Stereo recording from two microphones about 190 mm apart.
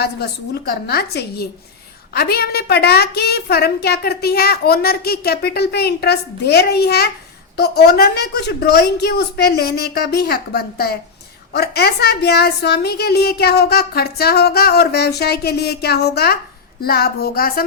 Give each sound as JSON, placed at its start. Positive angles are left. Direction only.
{"t": 0.0, "sound": "a child's voice", "side_deg": 60}
{"t": 16.8, "sound": "music", "side_deg": 55}